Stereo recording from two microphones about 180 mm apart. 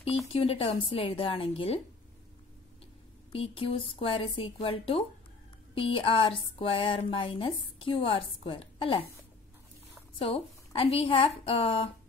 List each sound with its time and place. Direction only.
0.3 s a woman's voice: 35° left (ahead or behind)
3.3 s a woman's voice: 30° left (ahead or behind)
10.1 s a woman's voice: 30° left (ahead or behind)